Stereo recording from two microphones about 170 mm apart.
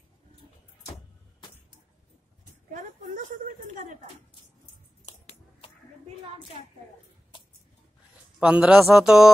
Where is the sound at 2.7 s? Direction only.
50° right (ahead or behind).